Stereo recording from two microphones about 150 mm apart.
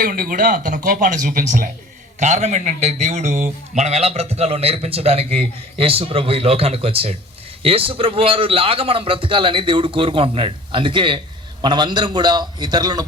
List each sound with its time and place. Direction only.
0.0 s speech: 70° right (ahead or behind)
2.1 s a man's voice: 50° right (ahead or behind); by 13.1 s 25° right (ahead or behind)